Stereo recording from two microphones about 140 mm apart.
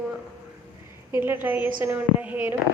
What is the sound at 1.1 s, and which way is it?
A woman's voice, 15° right (ahead or behind).